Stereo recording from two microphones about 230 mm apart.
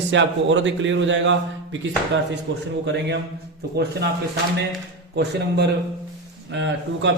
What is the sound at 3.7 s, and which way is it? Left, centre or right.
Speech, right.